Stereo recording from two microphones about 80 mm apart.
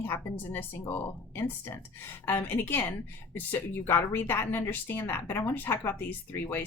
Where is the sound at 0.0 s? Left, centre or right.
Left.